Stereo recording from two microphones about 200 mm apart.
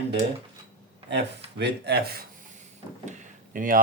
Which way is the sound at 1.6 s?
55° right (ahead or behind).